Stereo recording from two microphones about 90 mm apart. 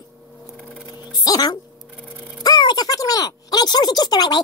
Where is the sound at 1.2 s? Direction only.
45° left (ahead or behind).